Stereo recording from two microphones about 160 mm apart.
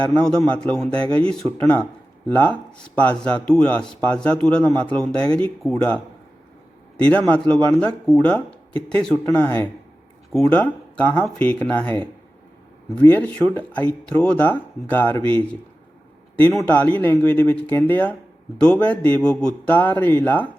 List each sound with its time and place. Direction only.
0.0 s speech: 5° left (ahead or behind)
0.9 s speech: 35° right (ahead or behind)
1.5 s speech: 10° left (ahead or behind)
13.0 s speech: 10° left (ahead or behind)